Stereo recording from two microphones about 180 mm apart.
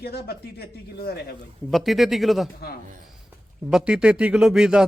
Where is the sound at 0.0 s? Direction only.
60° left (ahead or behind).